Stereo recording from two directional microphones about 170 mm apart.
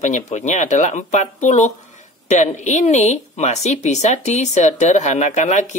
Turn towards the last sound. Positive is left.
turn(degrees=45)  # may be behind; listen again after turning